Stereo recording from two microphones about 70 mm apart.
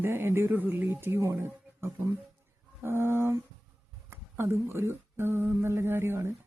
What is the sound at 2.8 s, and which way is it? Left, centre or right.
A woman's voice, right.